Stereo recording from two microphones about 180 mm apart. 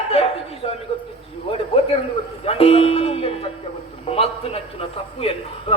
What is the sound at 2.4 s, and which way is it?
Speech, 30° left (ahead or behind).